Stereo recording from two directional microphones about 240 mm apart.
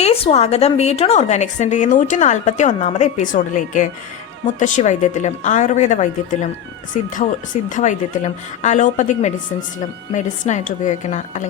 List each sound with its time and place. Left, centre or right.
0.0 s speech: left